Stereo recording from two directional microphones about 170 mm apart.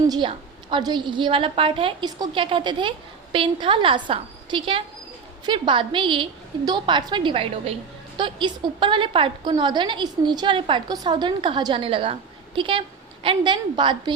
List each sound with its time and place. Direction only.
0.1 s a woman's voice: 30° right (ahead or behind)